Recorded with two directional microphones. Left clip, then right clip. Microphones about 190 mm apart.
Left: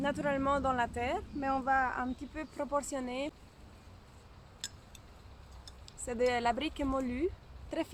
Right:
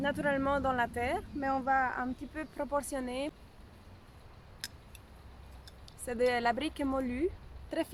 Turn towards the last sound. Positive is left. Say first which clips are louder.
# right 2 dB
turn(degrees=-10)  # may be behind; listen again after turning